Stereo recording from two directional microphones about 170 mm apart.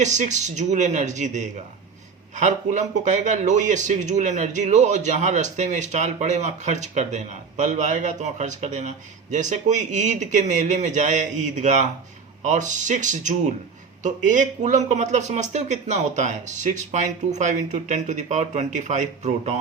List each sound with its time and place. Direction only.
0.0 s speech: 45° right (ahead or behind)